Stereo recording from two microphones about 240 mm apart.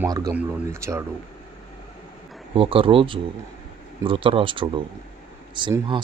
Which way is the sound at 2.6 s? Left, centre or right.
Right.